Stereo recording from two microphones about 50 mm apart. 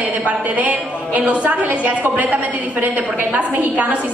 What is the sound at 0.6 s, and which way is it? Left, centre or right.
A woman's voice, right.